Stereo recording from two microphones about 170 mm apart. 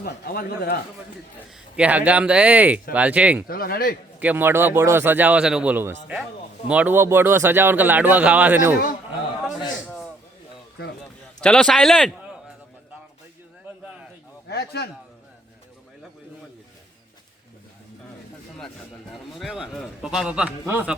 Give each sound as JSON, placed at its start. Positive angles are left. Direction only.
{"t": 0.0, "sound": "speech", "side_deg": 65}
{"t": 1.7, "sound": "speech", "side_deg": -10}
{"t": 3.4, "sound": "speech", "side_deg": 60}
{"t": 4.2, "sound": "speech", "side_deg": -10}
{"t": 11.3, "sound": "a man's voice", "side_deg": 5}
{"t": 14.4, "sound": "a sound", "side_deg": 70}
{"t": 19.1, "sound": "a man's voice", "side_deg": 0}